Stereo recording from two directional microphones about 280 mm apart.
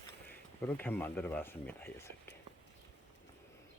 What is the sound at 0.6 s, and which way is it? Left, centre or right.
Speech, centre.